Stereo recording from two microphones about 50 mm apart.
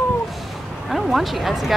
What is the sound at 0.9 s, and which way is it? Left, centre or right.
Speech, centre.